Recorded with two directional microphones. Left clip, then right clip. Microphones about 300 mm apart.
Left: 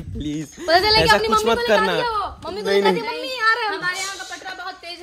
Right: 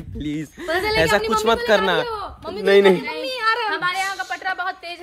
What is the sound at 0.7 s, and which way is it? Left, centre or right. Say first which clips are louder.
Speech: left 6 dB; centre.